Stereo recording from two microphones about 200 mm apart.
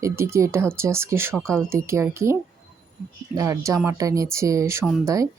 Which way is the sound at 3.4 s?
15° right (ahead or behind).